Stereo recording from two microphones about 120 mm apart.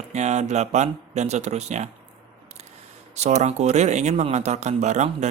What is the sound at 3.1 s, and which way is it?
Speech, 70° right (ahead or behind).